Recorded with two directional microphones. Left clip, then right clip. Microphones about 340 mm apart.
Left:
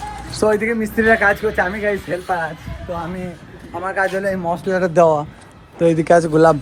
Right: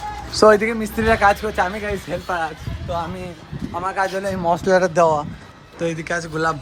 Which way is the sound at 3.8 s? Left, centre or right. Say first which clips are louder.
Left 2 dB; centre.